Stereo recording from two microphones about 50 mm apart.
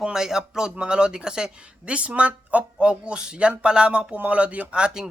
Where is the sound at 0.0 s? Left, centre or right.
Centre.